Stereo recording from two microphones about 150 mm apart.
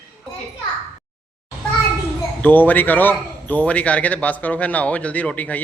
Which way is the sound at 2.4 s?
10° left (ahead or behind).